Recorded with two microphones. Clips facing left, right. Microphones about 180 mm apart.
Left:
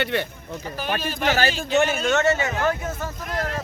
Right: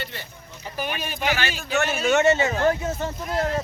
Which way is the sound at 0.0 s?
70° left (ahead or behind).